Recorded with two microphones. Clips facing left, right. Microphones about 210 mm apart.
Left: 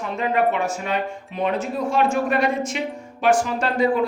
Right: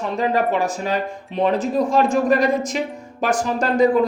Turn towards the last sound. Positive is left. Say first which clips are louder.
# right 4 dB
turn(degrees=-40)  # may be behind; listen again after turning